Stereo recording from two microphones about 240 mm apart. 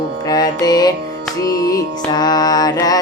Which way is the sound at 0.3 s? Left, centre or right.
Centre.